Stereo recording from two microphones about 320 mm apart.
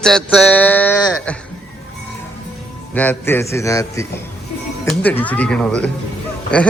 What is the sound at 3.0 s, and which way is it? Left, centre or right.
A man's voice, centre.